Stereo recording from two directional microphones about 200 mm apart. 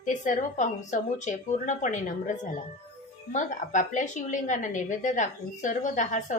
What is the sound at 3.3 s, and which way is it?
A woman's voice, 40° left (ahead or behind).